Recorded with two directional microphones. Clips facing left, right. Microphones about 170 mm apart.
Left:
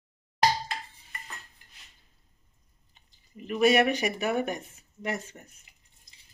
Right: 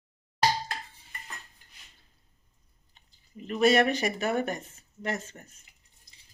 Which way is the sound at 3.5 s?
10° left (ahead or behind).